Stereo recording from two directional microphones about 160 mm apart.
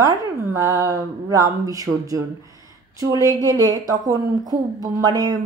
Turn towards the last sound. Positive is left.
turn(degrees=-25)  # may be behind; listen again after turning